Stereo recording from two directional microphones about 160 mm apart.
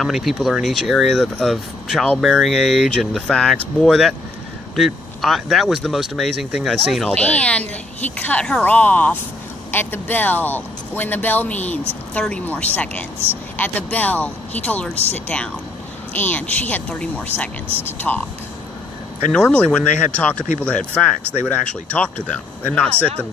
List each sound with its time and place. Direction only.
0.0 s speech: centre (ahead or behind)
19.3 s speech: 5° left (ahead or behind)